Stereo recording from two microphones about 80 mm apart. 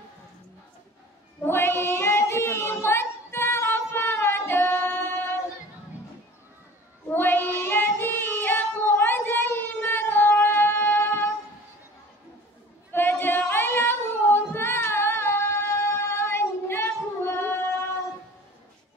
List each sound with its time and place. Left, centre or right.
1.4 s child singing: left
7.1 s child singing: left
12.9 s singing: left